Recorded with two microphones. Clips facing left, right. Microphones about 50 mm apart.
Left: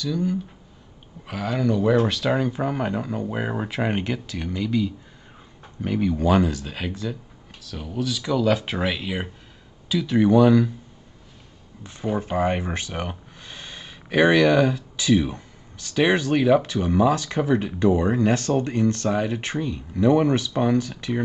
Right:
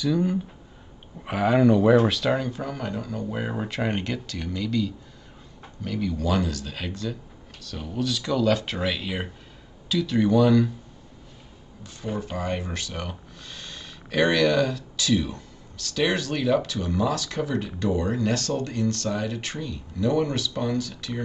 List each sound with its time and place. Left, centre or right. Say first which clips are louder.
0.0 s speech: right 1 dB; centre
2.6 s speech: left 6 dB; left
11.8 s speech: left 5 dB; left